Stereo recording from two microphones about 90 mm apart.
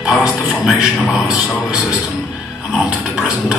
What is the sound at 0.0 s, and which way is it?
A man's voice, 10° right (ahead or behind).